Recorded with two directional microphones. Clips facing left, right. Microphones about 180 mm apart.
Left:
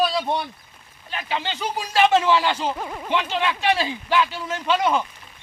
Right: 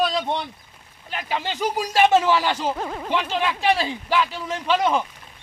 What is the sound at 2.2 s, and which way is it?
A man's voice, 5° right (ahead or behind).